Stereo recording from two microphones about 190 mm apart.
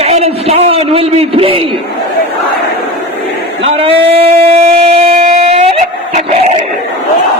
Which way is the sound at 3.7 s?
30° right (ahead or behind).